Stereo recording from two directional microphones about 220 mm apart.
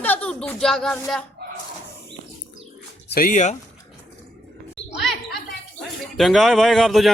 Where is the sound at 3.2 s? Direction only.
35° left (ahead or behind).